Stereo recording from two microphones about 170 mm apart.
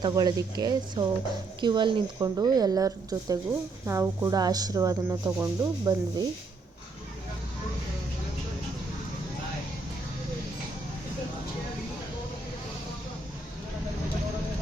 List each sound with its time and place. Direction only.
0.0 s speech: 25° right (ahead or behind)